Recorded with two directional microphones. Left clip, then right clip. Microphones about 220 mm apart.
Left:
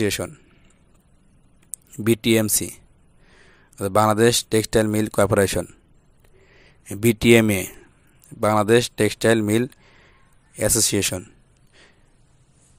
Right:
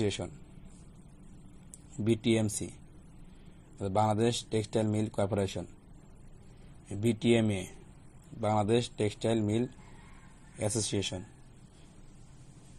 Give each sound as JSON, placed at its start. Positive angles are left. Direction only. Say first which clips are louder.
{"t": 0.0, "sound": "speech", "louder": "left 10 dB", "side_deg": 50}
{"t": 2.0, "sound": "speech", "louder": "left 10 dB", "side_deg": 45}
{"t": 3.7, "sound": "speech", "louder": "left 11 dB", "side_deg": 50}
{"t": 6.9, "sound": "speech", "louder": "left 13 dB", "side_deg": 45}